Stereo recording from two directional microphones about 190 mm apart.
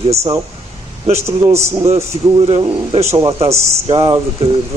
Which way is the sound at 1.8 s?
30° right (ahead or behind).